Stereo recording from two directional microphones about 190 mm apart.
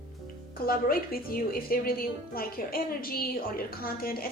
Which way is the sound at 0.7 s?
50° left (ahead or behind).